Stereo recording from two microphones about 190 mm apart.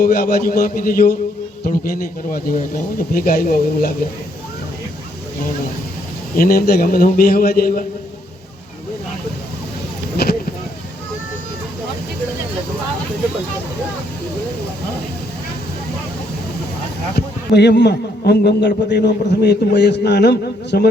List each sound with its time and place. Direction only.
0.0 s a man's voice: 50° left (ahead or behind)
6.3 s a man's voice: 50° left (ahead or behind)
10.2 s a sound: 55° left (ahead or behind)
17.2 s a man's voice: 60° left (ahead or behind)